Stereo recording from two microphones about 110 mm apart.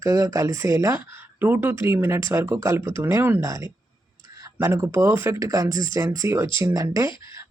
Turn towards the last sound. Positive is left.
turn(degrees=-30)  # may be behind; listen again after turning